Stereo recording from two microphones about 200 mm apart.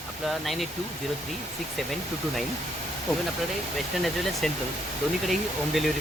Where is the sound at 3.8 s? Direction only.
Centre (ahead or behind).